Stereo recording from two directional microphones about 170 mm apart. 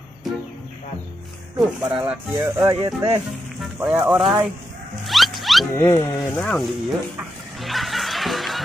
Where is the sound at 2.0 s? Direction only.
10° right (ahead or behind).